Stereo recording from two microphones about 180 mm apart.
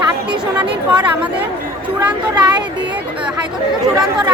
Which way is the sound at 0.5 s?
5° right (ahead or behind).